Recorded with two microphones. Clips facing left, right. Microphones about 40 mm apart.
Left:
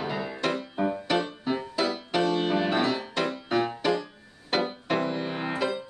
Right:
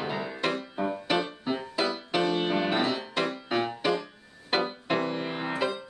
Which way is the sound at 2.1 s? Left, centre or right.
Centre.